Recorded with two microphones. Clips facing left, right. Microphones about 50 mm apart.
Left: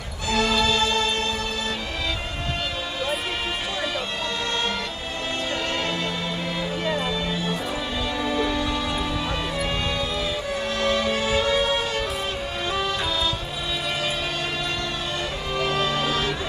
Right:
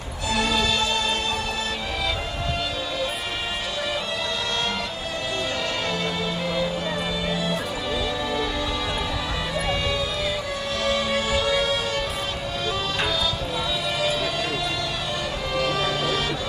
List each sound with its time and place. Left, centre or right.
0.3 s music: left
8.3 s music: left
9.7 s music: left
10.8 s music: left
15.5 s music: left